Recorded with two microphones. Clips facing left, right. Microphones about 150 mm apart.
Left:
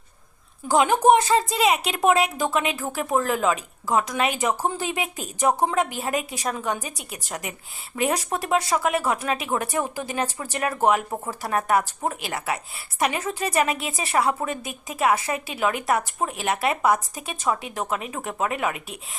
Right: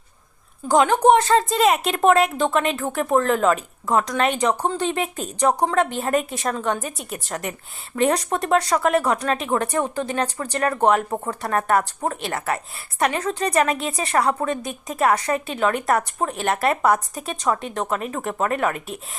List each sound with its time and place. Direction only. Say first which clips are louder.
0.7 s speech: right 2 dB; 10° left (ahead or behind)
5.6 s a woman's voice: right 3 dB; 15° left (ahead or behind)
5.9 s a woman's voice: right 5 dB; 5° left (ahead or behind)